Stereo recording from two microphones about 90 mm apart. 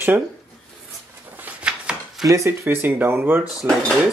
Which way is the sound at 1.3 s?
15° right (ahead or behind).